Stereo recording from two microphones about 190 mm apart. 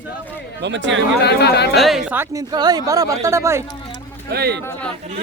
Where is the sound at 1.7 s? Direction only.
Centre (ahead or behind).